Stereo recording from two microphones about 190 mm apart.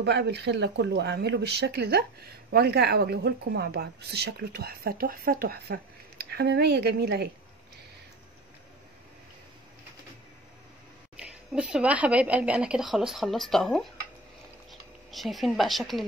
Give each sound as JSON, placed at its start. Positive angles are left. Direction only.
{"t": 0.0, "sound": "speech", "side_deg": -60}
{"t": 11.1, "sound": "speech", "side_deg": -5}